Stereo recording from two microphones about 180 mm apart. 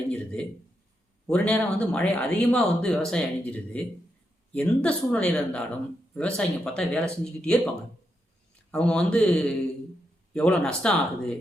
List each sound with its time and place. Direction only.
0.1 s speech: 5° left (ahead or behind)
8.7 s speech: 5° left (ahead or behind)